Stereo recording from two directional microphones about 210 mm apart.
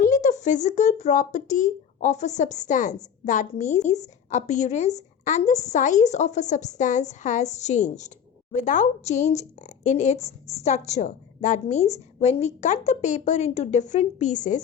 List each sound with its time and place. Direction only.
0.0 s a woman's voice: 35° left (ahead or behind)